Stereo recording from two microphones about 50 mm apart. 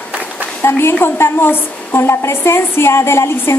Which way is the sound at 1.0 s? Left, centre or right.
Left.